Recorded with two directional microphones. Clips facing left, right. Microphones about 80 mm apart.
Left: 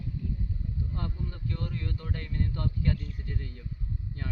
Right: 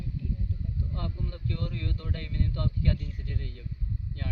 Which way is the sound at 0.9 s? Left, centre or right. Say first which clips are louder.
Even; left.